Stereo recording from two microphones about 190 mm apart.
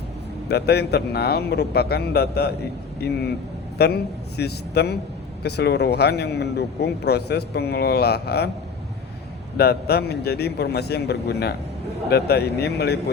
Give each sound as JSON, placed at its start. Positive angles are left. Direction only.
{"t": 0.4, "sound": "speech", "side_deg": 60}
{"t": 9.6, "sound": "speech", "side_deg": 55}